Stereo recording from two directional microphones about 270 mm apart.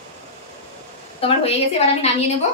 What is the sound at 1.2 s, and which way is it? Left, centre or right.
A woman's voice, left.